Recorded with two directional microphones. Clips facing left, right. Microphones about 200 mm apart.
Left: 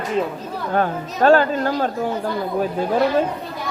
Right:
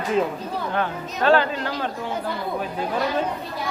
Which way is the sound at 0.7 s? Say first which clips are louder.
Left 9 dB; 45° left (ahead or behind).